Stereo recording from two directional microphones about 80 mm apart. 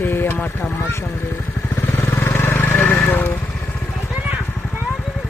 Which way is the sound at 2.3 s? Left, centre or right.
Left.